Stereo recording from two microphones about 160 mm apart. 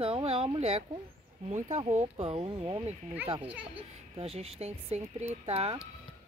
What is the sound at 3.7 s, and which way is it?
Speech, 35° right (ahead or behind).